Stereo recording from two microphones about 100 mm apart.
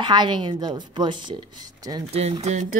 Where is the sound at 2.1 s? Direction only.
90° right.